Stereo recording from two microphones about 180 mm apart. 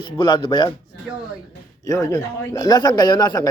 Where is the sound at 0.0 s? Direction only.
25° left (ahead or behind).